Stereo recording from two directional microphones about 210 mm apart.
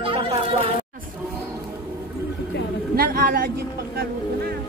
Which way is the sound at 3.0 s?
45° right (ahead or behind).